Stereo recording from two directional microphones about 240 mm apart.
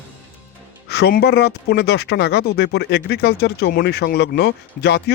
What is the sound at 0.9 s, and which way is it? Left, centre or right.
Speech, left.